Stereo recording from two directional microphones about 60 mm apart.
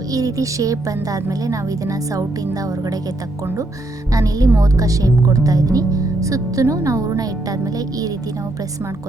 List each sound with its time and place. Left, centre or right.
0.1 s speech: right
4.1 s speech: right